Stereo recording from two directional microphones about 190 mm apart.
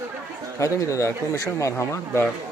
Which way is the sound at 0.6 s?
15° left (ahead or behind).